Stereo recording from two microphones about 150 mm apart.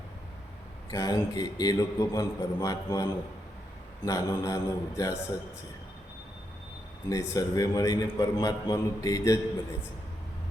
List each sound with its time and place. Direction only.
0.9 s a man's voice: 25° left (ahead or behind)
7.1 s a man's voice: 25° left (ahead or behind)